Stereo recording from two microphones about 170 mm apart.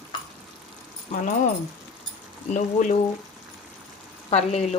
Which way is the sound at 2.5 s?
45° left (ahead or behind).